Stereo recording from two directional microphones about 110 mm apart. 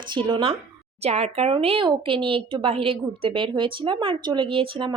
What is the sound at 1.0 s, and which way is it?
A woman's voice, 75° right (ahead or behind).